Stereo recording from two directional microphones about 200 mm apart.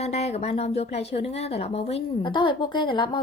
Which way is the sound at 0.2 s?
30° left (ahead or behind).